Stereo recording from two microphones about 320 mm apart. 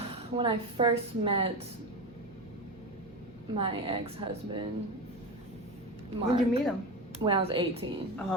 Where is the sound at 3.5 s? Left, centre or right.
Centre.